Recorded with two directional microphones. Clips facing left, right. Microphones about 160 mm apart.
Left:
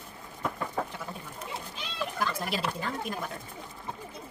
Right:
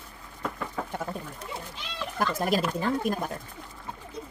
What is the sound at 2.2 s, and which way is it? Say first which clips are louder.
Speech: right 7 dB; 45° right (ahead or behind).